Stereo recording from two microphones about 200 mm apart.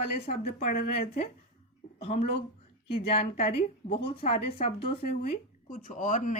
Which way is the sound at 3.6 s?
25° left (ahead or behind).